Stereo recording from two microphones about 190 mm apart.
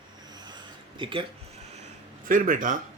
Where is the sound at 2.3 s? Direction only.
45° right (ahead or behind).